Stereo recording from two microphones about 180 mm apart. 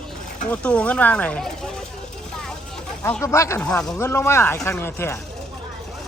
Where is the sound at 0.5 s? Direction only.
5° left (ahead or behind).